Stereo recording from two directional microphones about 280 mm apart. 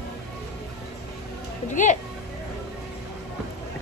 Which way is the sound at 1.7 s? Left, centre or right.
Left.